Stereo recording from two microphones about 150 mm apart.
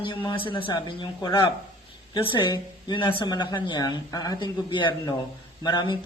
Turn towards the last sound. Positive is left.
turn(degrees=30)  # may be behind; listen again after turning